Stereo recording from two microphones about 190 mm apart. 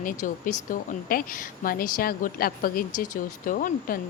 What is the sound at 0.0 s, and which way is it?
A woman's voice, 45° left (ahead or behind).